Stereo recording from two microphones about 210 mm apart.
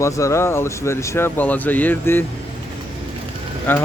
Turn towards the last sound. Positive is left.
turn(degrees=10)  # may be behind; listen again after turning